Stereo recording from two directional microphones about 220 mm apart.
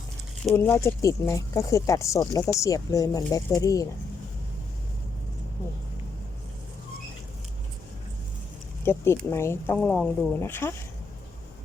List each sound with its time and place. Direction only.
0.5 s speech: 10° left (ahead or behind)
8.8 s speech: 10° left (ahead or behind)